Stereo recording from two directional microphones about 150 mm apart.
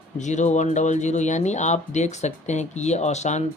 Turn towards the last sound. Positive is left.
turn(degrees=50)  # may be behind; listen again after turning